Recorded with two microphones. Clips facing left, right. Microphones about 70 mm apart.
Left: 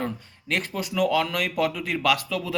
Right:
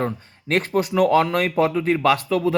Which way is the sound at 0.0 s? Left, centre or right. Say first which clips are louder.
Right 5 dB; right.